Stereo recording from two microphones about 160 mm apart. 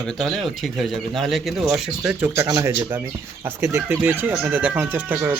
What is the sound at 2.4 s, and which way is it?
Speech, 20° right (ahead or behind).